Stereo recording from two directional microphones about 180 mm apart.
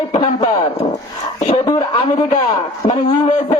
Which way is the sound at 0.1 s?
25° left (ahead or behind).